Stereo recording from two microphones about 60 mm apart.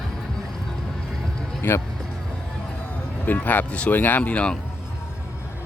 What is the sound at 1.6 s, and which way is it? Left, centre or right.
Music, left.